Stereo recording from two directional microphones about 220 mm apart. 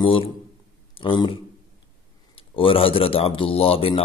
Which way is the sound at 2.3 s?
25° left (ahead or behind).